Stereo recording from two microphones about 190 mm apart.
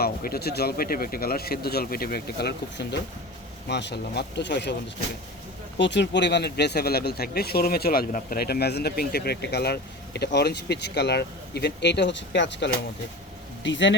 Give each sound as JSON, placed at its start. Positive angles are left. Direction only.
{"t": 0.0, "sound": "speech", "side_deg": 55}
{"t": 5.7, "sound": "speech", "side_deg": 70}